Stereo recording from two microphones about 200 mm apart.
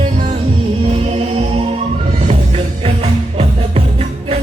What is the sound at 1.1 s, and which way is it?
Music, 30° right (ahead or behind).